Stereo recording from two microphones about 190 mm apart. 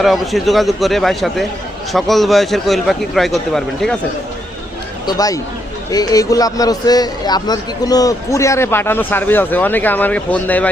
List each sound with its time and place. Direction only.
0.0 s a man's voice: centre (ahead or behind)
5.0 s a man's voice: 20° left (ahead or behind)